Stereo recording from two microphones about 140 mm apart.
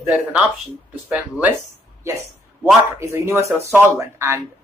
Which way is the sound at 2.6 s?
20° right (ahead or behind).